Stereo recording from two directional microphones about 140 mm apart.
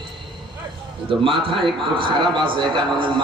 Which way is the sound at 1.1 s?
40° right (ahead or behind).